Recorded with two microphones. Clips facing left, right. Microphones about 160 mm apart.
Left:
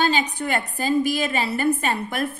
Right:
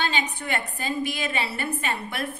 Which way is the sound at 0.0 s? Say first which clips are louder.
Left 6 dB; 40° left (ahead or behind).